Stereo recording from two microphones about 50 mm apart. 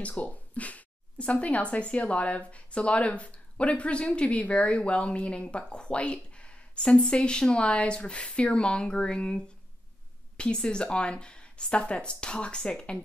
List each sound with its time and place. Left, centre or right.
0.2 s speech: left